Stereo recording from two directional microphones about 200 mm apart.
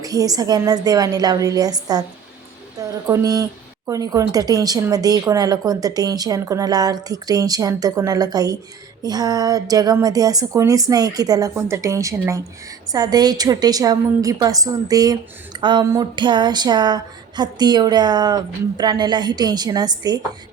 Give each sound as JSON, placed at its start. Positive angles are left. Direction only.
{"t": 0.0, "sound": "a woman's voice", "side_deg": -15}